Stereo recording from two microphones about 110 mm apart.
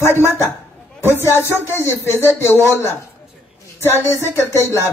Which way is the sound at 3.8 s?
25° left (ahead or behind).